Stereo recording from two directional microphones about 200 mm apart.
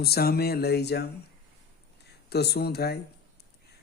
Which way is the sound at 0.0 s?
50° left (ahead or behind).